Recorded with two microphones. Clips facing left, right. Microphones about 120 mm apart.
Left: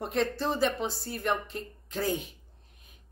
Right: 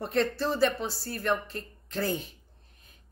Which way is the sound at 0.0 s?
15° left (ahead or behind).